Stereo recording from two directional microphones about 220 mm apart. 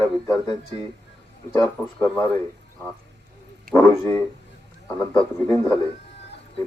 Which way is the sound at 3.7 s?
40° right (ahead or behind).